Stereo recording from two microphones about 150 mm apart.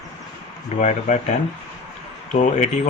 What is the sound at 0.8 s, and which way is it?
Speech, 50° left (ahead or behind).